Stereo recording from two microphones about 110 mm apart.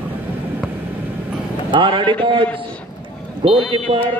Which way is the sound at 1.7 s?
45° right (ahead or behind).